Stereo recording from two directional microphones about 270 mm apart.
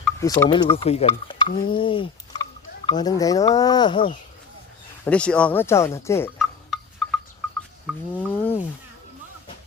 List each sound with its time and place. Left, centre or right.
0.2 s speech: centre
5.0 s speech: centre